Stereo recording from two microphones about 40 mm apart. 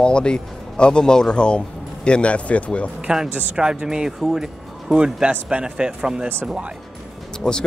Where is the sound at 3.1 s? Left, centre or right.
Centre.